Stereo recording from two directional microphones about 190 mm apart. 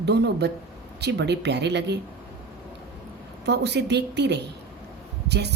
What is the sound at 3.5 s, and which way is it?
Speech, 60° right (ahead or behind).